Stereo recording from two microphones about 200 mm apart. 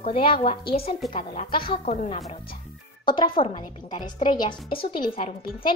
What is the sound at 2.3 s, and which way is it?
Speech, 45° left (ahead or behind).